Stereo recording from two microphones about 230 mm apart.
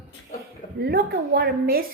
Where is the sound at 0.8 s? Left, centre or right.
Right.